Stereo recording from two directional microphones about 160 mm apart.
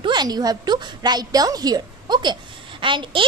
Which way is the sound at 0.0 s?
25° right (ahead or behind).